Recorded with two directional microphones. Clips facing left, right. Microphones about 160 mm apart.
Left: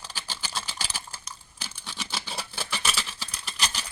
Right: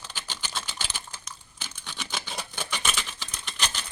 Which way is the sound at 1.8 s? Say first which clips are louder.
Even; 5° left (ahead or behind).